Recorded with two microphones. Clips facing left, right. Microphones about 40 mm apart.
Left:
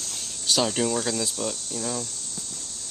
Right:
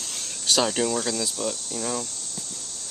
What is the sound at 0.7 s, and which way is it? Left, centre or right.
Speech, centre.